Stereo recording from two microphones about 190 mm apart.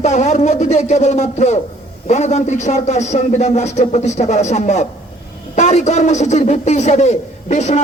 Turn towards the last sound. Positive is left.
turn(degrees=40)  # may be behind; listen again after turning